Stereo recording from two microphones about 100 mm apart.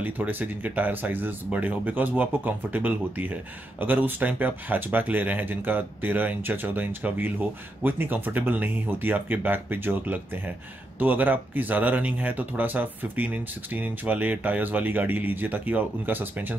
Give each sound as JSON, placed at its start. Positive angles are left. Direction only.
{"t": 0.0, "sound": "speech", "side_deg": -20}